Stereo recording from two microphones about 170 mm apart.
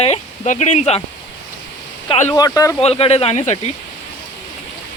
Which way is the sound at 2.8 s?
35° left (ahead or behind).